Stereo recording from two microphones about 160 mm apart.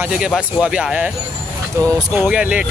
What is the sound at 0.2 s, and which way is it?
Speech, 5° right (ahead or behind).